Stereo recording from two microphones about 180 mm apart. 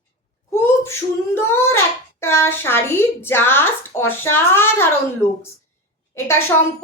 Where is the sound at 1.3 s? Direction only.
15° left (ahead or behind).